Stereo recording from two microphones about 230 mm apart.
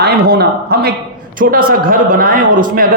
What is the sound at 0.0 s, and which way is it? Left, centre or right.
A man's voice, right.